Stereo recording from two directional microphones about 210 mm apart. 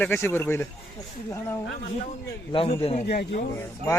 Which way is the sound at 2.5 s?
25° left (ahead or behind).